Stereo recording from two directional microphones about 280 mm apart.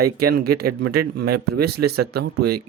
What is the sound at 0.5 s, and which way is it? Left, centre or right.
Speech, right.